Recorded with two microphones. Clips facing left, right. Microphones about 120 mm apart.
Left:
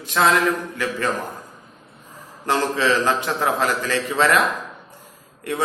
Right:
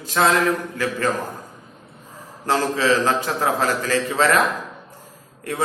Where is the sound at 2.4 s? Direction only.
35° right (ahead or behind).